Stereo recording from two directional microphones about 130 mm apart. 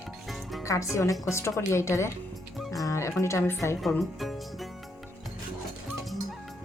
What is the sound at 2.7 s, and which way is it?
Music, 25° left (ahead or behind).